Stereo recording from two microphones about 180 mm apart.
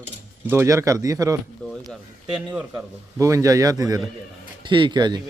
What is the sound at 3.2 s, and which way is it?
A man's voice, 15° right (ahead or behind).